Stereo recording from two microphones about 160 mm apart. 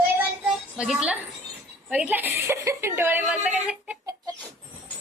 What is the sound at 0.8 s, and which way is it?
A woman's voice, 5° right (ahead or behind).